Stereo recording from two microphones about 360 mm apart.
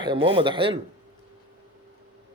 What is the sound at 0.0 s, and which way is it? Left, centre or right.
Speech, centre.